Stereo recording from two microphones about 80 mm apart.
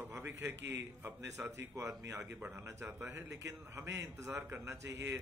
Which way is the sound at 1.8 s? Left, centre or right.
Right.